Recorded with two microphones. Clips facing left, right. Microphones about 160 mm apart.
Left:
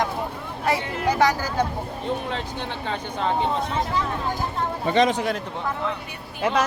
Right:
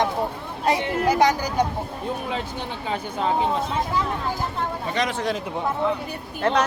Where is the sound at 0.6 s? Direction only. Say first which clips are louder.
Right 2 dB; 20° right (ahead or behind); by 3.6 s 5° right (ahead or behind).